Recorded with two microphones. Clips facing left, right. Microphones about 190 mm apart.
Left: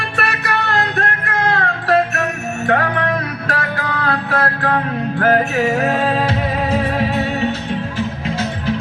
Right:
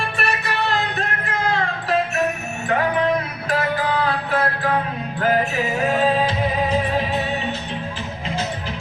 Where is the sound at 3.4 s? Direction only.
70° left (ahead or behind).